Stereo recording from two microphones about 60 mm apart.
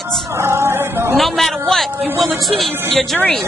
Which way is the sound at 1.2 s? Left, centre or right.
Centre.